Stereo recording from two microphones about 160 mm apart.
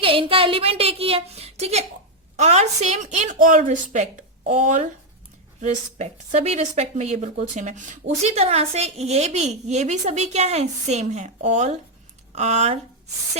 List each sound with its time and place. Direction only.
0.0 s a woman's voice: 35° right (ahead or behind)